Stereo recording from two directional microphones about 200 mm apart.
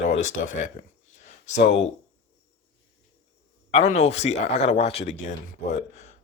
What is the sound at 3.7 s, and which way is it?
Speech, 30° left (ahead or behind).